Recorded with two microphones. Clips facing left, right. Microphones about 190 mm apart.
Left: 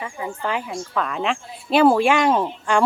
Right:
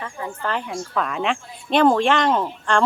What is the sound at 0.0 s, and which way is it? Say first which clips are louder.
Speech: left 1 dB; 10° left (ahead or behind).